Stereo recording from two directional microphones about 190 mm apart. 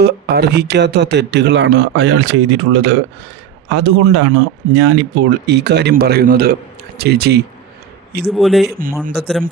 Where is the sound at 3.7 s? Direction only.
90° right; by 7.4 s 55° right (ahead or behind).